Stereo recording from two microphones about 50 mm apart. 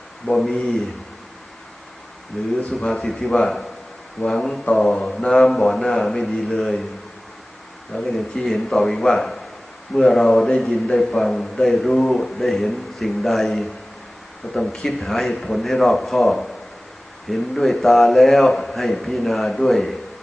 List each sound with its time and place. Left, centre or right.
0.4 s a man's voice: centre
2.6 s a man's voice: centre
7.9 s a man's voice: centre